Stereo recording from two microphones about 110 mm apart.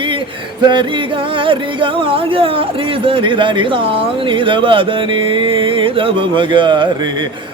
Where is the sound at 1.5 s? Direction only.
50° right (ahead or behind).